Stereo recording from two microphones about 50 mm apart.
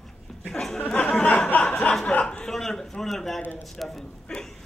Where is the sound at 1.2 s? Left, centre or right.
Left.